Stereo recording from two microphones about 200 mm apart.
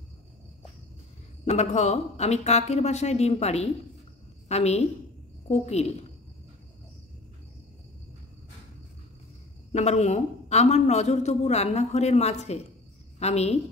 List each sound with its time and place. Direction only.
1.4 s a man's voice: 35° left (ahead or behind)
9.7 s a man's voice: 35° left (ahead or behind)